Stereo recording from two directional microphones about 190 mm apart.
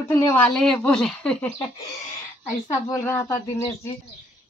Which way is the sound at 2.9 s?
15° left (ahead or behind).